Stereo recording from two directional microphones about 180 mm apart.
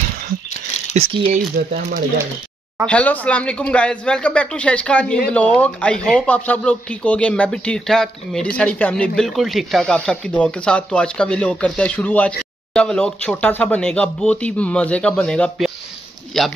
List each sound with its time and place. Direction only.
0.9 s speech: 35° right (ahead or behind)
1.7 s speech: 55° right (ahead or behind)
2.9 s speech: 10° left (ahead or behind)